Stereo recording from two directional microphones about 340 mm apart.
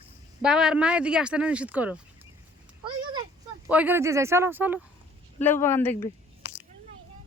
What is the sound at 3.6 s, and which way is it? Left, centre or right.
Speech, centre.